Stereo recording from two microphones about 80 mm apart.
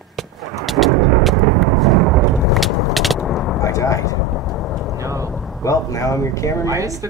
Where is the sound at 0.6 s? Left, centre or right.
Centre.